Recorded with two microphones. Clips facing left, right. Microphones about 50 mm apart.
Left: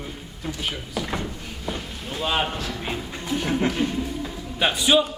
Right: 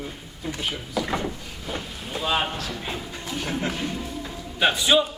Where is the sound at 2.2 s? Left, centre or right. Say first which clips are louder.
Even; centre.